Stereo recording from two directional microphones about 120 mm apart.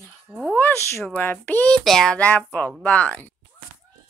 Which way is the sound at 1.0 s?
15° left (ahead or behind).